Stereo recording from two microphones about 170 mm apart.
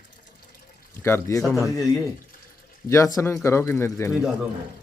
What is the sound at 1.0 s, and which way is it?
Speech, 15° left (ahead or behind).